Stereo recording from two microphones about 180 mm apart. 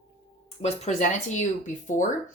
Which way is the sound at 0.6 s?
40° left (ahead or behind).